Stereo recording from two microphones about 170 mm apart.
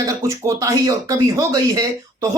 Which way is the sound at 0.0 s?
20° right (ahead or behind).